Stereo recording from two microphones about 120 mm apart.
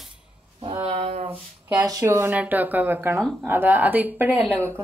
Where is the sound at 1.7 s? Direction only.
30° right (ahead or behind).